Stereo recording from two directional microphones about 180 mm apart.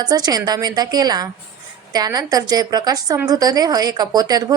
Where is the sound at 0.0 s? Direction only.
20° right (ahead or behind).